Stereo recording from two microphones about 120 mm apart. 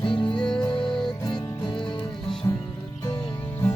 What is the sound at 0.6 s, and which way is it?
Music, 40° left (ahead or behind).